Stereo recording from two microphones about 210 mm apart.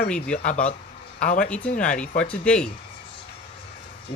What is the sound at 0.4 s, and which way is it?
Speech, 35° left (ahead or behind).